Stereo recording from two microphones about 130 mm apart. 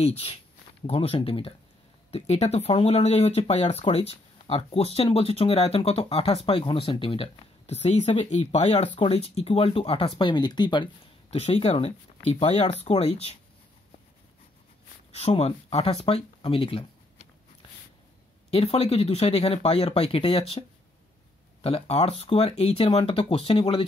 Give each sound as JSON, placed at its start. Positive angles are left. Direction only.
{"t": 0.0, "sound": "speech", "side_deg": 45}
{"t": 8.8, "sound": "speech", "side_deg": 40}
{"t": 11.2, "sound": "speech", "side_deg": 55}
{"t": 15.0, "sound": "speech", "side_deg": 50}
{"t": 18.5, "sound": "speech", "side_deg": 50}